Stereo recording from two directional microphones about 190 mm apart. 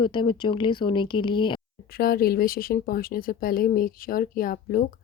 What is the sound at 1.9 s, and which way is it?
Speech, 50° left (ahead or behind).